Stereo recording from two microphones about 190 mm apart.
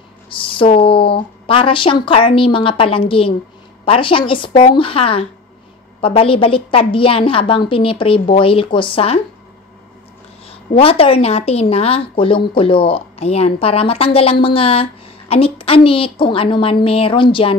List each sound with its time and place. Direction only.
0.3 s speech: 30° left (ahead or behind)
10.5 s a woman's voice: 30° left (ahead or behind)